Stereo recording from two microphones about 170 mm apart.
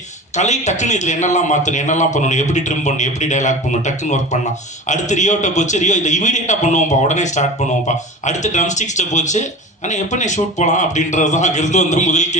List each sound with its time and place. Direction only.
0.3 s speech: 45° left (ahead or behind)